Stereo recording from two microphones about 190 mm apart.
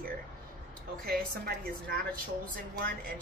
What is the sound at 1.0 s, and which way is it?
A woman's voice, 55° right (ahead or behind).